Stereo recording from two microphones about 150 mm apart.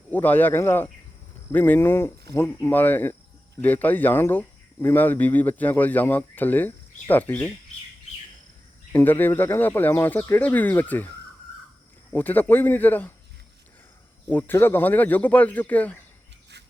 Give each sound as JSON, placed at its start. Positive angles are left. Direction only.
{"t": 0.1, "sound": "speech", "side_deg": 10}
{"t": 8.9, "sound": "speech", "side_deg": 15}
{"t": 12.1, "sound": "speech", "side_deg": 10}
{"t": 14.3, "sound": "speech", "side_deg": 10}